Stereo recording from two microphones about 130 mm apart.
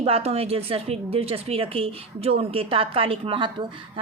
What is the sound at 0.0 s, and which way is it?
A woman's voice, 50° right (ahead or behind).